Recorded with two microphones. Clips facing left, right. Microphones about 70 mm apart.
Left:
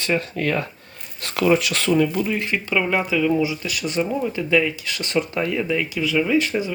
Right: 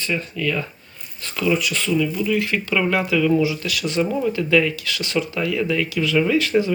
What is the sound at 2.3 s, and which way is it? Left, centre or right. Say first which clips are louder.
Speech: right 3 dB; left.